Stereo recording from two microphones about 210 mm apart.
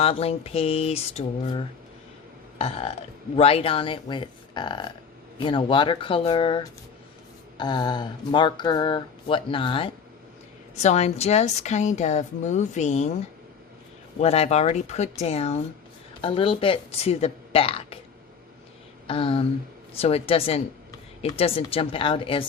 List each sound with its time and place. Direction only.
0.0 s a woman's voice: 30° left (ahead or behind)
14.2 s a woman's voice: 30° left (ahead or behind)
19.0 s a sound: 25° left (ahead or behind)
20.0 s a woman's voice: 30° left (ahead or behind)